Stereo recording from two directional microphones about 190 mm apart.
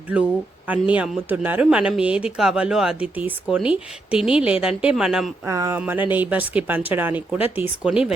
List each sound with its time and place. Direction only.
0.7 s speech: 5° right (ahead or behind)
5.5 s speech: 15° right (ahead or behind)